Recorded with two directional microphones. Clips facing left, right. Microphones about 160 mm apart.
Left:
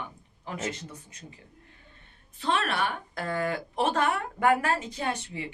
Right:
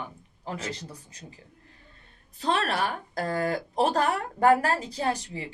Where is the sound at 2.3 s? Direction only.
35° right (ahead or behind).